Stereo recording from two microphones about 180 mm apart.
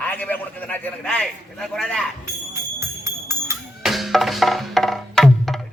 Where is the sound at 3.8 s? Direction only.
Centre (ahead or behind).